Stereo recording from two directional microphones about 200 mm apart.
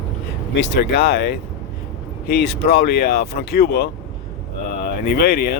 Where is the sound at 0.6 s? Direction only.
55° left (ahead or behind).